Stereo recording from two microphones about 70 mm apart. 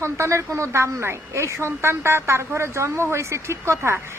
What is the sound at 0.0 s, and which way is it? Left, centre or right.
A woman's voice, right.